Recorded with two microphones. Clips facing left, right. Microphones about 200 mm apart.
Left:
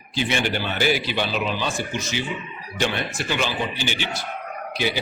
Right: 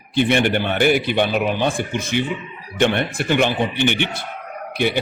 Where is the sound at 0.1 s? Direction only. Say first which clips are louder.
Right 7 dB; 60° right (ahead or behind).